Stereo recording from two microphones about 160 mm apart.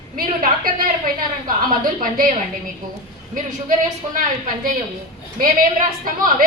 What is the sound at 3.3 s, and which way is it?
A woman's voice, 55° right (ahead or behind).